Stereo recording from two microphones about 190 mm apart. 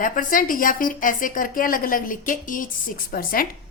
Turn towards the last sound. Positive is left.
turn(degrees=50)  # may be behind; listen again after turning